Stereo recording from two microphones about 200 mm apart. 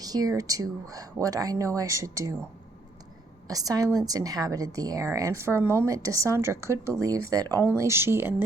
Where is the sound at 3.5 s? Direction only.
15° right (ahead or behind).